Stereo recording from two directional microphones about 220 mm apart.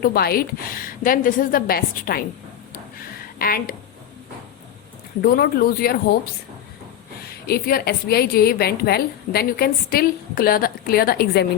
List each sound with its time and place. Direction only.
0.0 s a woman's voice: 45° left (ahead or behind)
3.3 s speech: 40° left (ahead or behind)
5.2 s a woman's voice: 45° left (ahead or behind)
7.4 s a woman's voice: 45° left (ahead or behind)